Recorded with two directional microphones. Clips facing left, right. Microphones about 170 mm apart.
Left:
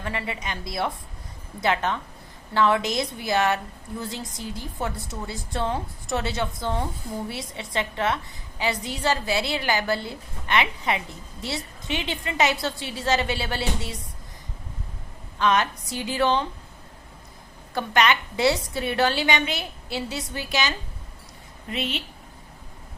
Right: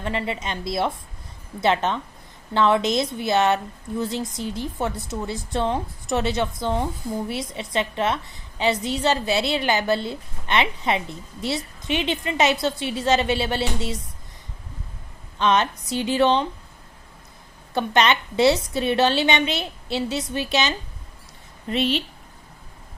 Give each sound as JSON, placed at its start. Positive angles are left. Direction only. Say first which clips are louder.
{"t": 0.0, "sound": "a woman's voice", "louder": "right 4 dB", "side_deg": -25}
{"t": 15.4, "sound": "a woman's voice", "louder": "right 2 dB", "side_deg": -20}
{"t": 17.7, "sound": "a woman's voice", "louder": "right 2 dB", "side_deg": -25}
{"t": 21.7, "sound": "speech", "louder": "right 7 dB", "side_deg": -35}